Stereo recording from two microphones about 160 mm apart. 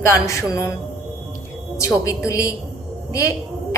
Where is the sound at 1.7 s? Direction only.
20° left (ahead or behind).